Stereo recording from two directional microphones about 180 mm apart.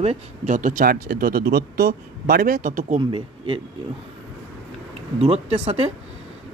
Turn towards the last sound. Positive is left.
turn(degrees=-35)  # may be behind; listen again after turning